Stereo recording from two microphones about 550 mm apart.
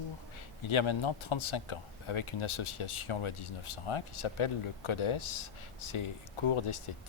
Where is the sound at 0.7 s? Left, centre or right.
Left.